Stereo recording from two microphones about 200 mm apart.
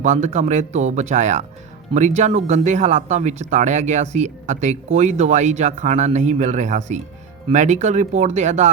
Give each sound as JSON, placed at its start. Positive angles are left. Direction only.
{"t": 0.0, "sound": "speech", "side_deg": -35}